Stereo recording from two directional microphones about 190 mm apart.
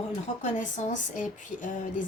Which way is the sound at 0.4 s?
40° left (ahead or behind).